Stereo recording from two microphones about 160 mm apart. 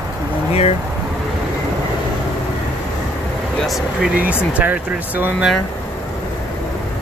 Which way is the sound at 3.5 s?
Centre (ahead or behind).